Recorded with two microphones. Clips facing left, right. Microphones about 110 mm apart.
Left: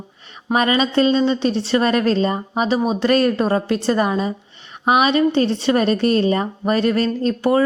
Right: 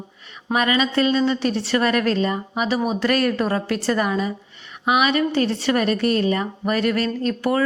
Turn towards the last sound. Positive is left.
turn(degrees=30)  # may be behind; listen again after turning